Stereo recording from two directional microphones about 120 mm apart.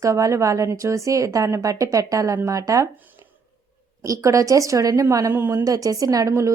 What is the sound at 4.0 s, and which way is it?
A woman's voice, 25° right (ahead or behind).